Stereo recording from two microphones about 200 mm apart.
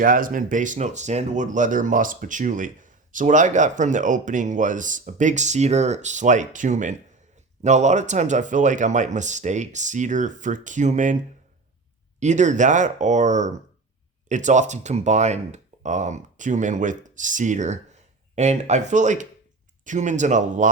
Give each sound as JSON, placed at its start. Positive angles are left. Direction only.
{"t": 0.0, "sound": "speech", "side_deg": -45}
{"t": 12.2, "sound": "speech", "side_deg": -35}